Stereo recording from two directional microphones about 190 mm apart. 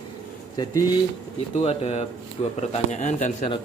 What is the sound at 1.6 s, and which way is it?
Speech, 35° left (ahead or behind).